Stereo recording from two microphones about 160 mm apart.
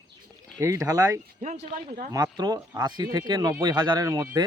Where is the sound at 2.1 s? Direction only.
25° right (ahead or behind).